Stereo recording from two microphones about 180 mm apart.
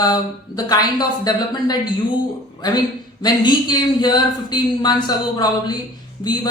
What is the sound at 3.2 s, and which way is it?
Speech, 25° left (ahead or behind).